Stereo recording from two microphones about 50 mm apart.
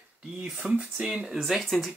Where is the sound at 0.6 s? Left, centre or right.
Right.